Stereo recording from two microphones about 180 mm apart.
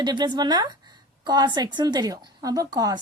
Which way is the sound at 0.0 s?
25° right (ahead or behind).